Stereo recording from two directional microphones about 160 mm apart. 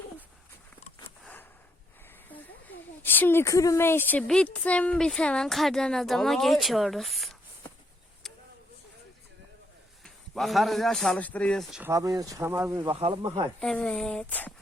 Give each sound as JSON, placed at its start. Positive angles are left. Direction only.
{"t": 1.2, "sound": "a sound", "side_deg": 10}
{"t": 3.0, "sound": "speech", "side_deg": 10}
{"t": 10.0, "sound": "speech", "side_deg": 0}
{"t": 11.8, "sound": "speech", "side_deg": -20}
{"t": 12.8, "sound": "speech", "side_deg": -35}
{"t": 13.6, "sound": "speech", "side_deg": 5}